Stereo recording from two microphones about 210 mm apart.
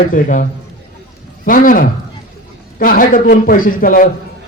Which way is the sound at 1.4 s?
40° left (ahead or behind).